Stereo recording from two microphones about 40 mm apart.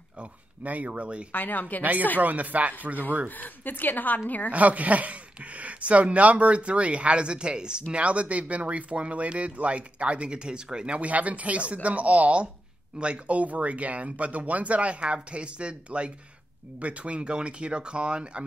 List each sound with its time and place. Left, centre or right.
0.7 s speech: right
1.3 s a woman's voice: left
1.8 s speech: right
3.3 s a woman's voice: left
4.5 s speech: right
7.9 s speech: right
11.0 s speech: right